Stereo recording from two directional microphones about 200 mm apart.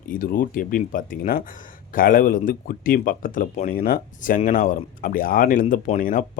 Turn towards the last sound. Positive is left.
turn(degrees=40)  # may be behind; listen again after turning